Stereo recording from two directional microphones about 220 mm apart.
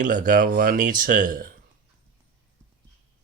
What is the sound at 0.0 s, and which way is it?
Speech, 35° right (ahead or behind).